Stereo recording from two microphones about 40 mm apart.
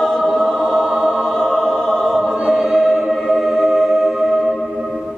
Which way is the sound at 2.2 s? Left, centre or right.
Centre.